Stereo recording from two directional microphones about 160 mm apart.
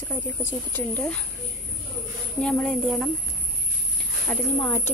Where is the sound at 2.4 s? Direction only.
5° left (ahead or behind).